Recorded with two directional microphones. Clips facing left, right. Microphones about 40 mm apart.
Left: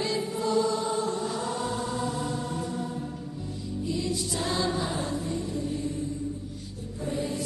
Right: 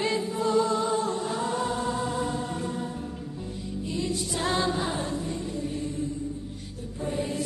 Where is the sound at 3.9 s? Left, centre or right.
Right.